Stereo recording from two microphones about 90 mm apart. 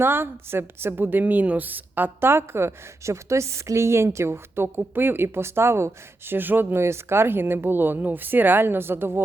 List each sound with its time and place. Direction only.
0.0 s a woman's voice: 25° right (ahead or behind)